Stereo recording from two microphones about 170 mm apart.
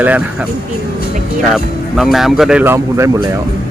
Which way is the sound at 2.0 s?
Centre (ahead or behind).